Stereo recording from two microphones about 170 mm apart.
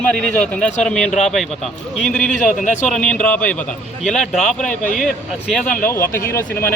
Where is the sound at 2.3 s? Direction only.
45° left (ahead or behind).